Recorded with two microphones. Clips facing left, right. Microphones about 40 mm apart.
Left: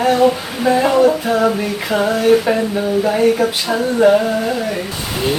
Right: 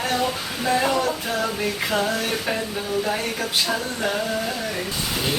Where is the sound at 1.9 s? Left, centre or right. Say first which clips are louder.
Left 15 dB; centre.